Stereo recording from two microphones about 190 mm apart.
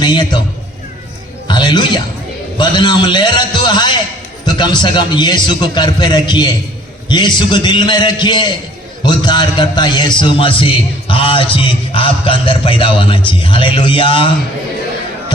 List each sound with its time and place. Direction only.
0.0 s a man's voice: 25° left (ahead or behind)
1.5 s music: 25° left (ahead or behind)
2.6 s a man's voice: 25° left (ahead or behind)